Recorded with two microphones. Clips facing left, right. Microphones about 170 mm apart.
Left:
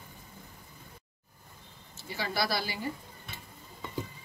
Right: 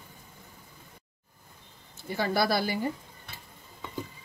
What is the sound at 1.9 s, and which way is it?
Speech, 50° right (ahead or behind).